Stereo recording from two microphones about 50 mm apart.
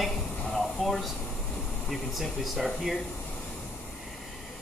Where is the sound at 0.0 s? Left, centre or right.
Centre.